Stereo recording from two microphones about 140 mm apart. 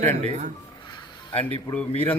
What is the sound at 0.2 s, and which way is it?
Speech, 55° right (ahead or behind).